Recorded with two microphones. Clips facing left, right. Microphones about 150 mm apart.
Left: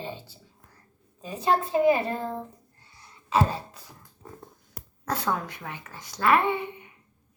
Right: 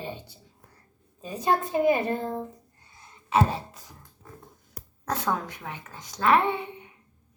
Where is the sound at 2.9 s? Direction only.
20° right (ahead or behind).